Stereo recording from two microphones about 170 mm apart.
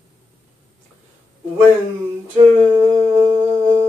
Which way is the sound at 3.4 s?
20° right (ahead or behind).